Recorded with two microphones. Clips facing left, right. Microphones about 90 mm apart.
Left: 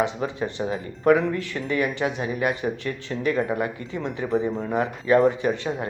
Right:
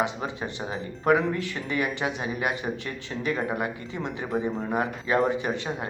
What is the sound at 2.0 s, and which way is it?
Speech, 35° left (ahead or behind).